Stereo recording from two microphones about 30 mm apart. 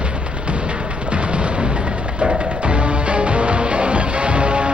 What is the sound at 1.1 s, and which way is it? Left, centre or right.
Music, right.